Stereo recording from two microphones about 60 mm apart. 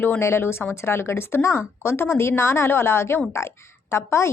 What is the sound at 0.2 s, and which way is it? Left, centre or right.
A woman's voice, left.